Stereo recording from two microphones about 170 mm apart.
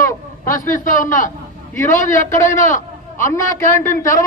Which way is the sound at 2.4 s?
45° left (ahead or behind).